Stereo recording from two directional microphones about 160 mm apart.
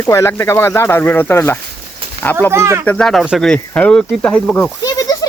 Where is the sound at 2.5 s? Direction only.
15° right (ahead or behind).